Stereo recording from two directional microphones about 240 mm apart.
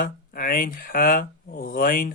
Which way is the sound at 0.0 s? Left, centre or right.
Left.